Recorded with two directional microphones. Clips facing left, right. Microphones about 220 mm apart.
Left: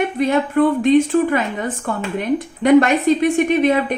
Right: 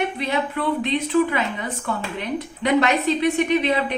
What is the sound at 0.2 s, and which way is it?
A woman's voice, 50° left (ahead or behind).